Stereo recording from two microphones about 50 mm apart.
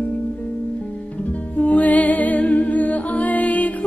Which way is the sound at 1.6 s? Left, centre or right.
Left.